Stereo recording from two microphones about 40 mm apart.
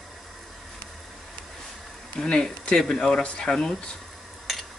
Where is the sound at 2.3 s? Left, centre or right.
Left.